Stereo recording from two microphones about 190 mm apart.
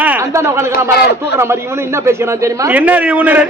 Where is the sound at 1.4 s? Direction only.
15° right (ahead or behind).